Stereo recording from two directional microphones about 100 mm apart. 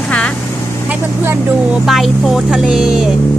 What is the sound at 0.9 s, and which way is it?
Speech, 20° right (ahead or behind).